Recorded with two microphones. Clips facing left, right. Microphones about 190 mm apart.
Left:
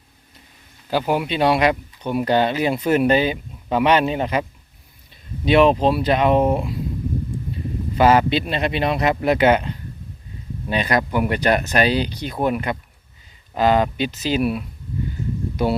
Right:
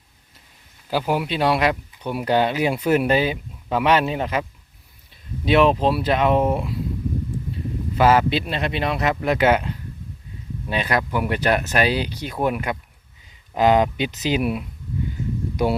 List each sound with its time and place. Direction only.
0.9 s speech: 5° right (ahead or behind)
5.5 s speech: centre (ahead or behind)
7.9 s speech: 5° right (ahead or behind)
13.5 s speech: 15° right (ahead or behind)